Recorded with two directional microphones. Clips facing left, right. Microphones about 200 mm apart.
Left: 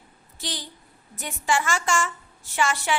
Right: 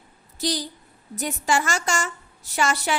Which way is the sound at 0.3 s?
40° right (ahead or behind).